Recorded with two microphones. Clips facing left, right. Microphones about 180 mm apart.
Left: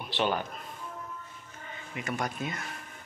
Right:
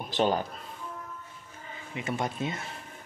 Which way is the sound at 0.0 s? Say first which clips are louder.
Right 3 dB; 40° right (ahead or behind).